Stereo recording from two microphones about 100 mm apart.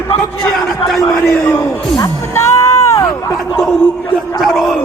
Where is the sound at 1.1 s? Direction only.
20° left (ahead or behind).